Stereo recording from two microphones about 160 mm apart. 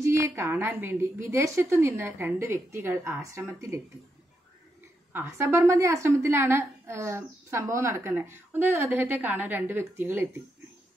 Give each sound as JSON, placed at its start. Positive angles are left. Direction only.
{"t": 0.0, "sound": "a woman's voice", "side_deg": -15}
{"t": 5.1, "sound": "a woman's voice", "side_deg": -15}